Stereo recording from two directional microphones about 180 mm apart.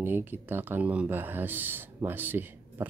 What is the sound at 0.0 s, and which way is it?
A man's voice, 10° right (ahead or behind).